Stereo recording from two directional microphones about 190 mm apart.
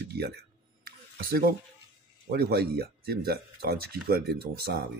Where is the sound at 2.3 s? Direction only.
55° right (ahead or behind).